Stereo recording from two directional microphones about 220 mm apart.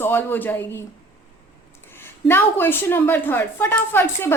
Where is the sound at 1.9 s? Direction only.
10° left (ahead or behind).